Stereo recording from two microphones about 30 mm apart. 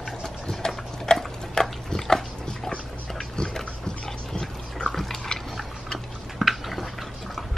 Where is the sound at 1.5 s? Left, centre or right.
Centre.